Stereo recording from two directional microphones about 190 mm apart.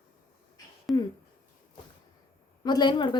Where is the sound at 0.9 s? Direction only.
Centre (ahead or behind).